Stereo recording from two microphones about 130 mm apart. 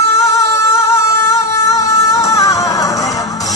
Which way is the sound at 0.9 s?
25° left (ahead or behind).